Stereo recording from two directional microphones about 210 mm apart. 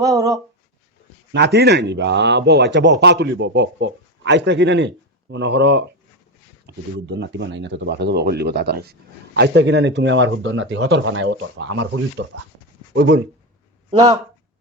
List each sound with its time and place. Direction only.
0.0 s speech: 15° right (ahead or behind)
1.5 s speech: 55° right (ahead or behind); by 11.9 s 70° right (ahead or behind)
12.2 s speech: 60° right (ahead or behind)